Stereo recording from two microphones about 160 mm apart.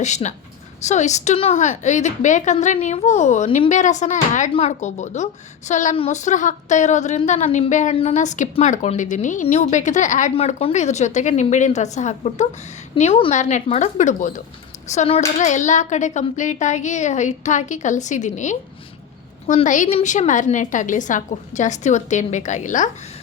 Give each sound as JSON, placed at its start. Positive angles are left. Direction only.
{"t": 0.0, "sound": "a woman's voice", "side_deg": 45}
{"t": 10.3, "sound": "a woman's voice", "side_deg": 40}